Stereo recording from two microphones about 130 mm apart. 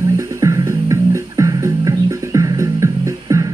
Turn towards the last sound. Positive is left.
turn(degrees=-25)  # may be behind; listen again after turning